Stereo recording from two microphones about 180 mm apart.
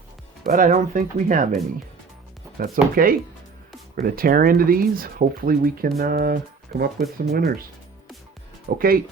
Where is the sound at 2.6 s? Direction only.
55° right (ahead or behind).